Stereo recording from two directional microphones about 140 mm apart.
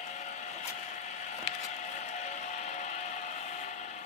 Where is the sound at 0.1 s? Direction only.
55° left (ahead or behind).